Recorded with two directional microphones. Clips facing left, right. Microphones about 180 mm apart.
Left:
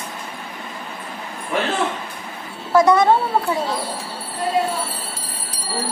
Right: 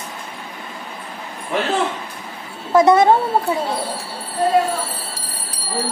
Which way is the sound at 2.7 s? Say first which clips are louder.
Right 2 dB; 25° right (ahead or behind).